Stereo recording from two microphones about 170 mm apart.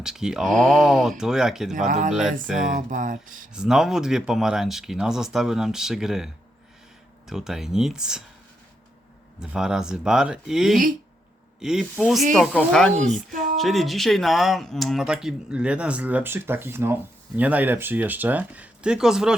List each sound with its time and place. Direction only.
0.0 s speech: 5° right (ahead or behind)
1.9 s speech: 45° right (ahead or behind)
3.5 s speech: 5° right (ahead or behind)
9.4 s speech: 5° right (ahead or behind)